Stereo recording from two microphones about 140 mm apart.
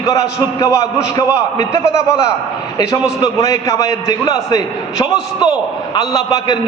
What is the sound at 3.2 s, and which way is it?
A man's voice, 25° left (ahead or behind).